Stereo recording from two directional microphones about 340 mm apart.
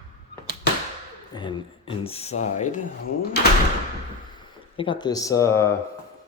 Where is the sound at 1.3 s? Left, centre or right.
Centre.